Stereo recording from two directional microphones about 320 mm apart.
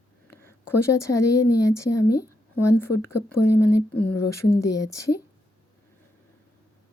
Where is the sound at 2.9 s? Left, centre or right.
Left.